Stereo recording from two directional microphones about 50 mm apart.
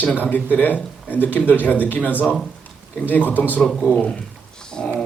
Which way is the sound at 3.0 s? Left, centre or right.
Left.